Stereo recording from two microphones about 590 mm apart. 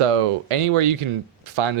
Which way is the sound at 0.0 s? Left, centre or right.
Right.